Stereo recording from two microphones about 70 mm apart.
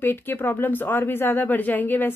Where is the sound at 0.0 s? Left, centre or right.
Left.